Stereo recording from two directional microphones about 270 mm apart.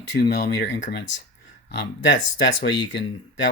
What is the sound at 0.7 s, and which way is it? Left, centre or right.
Speech, left.